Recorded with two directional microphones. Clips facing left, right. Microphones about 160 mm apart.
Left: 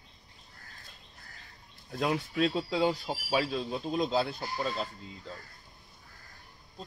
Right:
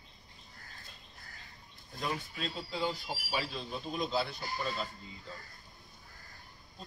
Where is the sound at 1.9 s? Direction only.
75° left (ahead or behind).